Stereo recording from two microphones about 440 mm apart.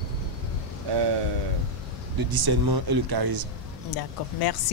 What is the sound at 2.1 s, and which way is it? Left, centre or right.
Speech, right.